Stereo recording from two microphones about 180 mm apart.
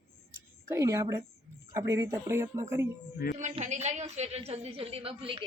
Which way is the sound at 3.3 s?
40° right (ahead or behind).